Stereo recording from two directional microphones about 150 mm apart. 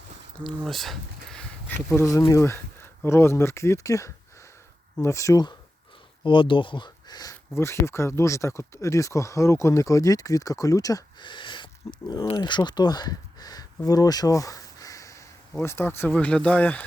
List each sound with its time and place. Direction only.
0.4 s speech: centre (ahead or behind)
2.0 s speech: 20° left (ahead or behind)
6.2 s speech: 35° left (ahead or behind); by 16.8 s 10° left (ahead or behind)